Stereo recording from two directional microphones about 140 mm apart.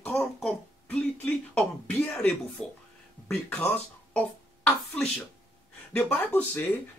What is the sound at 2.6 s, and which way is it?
Speech, 5° left (ahead or behind).